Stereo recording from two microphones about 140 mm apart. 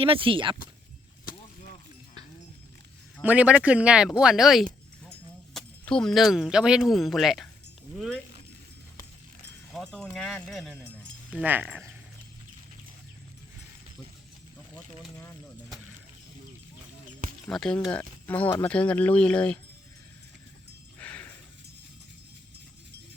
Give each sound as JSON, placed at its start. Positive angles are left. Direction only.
{"t": 0.0, "sound": "speech", "side_deg": -40}
{"t": 3.2, "sound": "speech", "side_deg": -10}
{"t": 9.7, "sound": "speech", "side_deg": 0}
{"t": 11.3, "sound": "speech", "side_deg": -10}
{"t": 17.4, "sound": "speech", "side_deg": 5}
{"t": 21.0, "sound": "a sound", "side_deg": 10}